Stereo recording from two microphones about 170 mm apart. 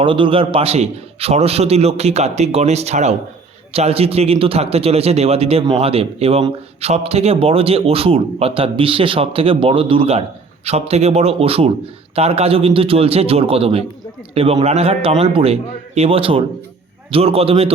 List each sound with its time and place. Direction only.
0.0 s a man's voice: 30° right (ahead or behind)